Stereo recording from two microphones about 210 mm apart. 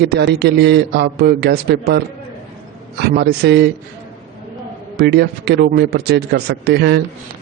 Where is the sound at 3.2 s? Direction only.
50° right (ahead or behind).